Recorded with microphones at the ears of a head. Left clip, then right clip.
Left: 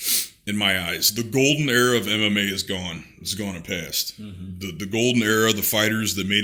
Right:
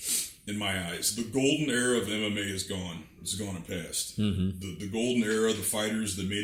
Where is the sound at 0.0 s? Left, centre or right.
Left.